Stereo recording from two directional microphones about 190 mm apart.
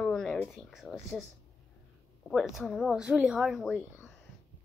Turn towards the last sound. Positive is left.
turn(degrees=0)  # may be behind; listen again after turning